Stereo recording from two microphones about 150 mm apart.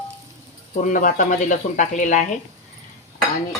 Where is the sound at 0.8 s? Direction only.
60° left (ahead or behind).